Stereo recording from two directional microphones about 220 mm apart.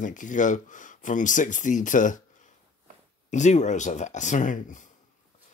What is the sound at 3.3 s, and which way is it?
Speech, 30° left (ahead or behind).